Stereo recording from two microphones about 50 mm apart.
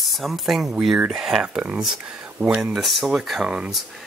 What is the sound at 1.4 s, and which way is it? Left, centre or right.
Speech, centre.